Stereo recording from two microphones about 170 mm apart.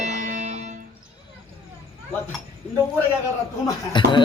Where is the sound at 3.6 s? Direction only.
25° left (ahead or behind).